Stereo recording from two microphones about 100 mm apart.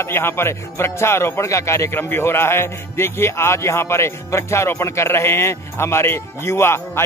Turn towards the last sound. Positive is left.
turn(degrees=25)  # may be behind; listen again after turning